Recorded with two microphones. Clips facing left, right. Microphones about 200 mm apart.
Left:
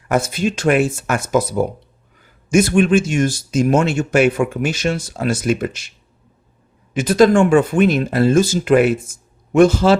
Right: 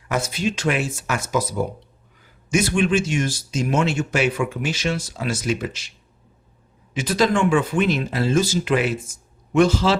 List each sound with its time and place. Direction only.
0.1 s speech: 50° left (ahead or behind)
6.9 s speech: 50° left (ahead or behind)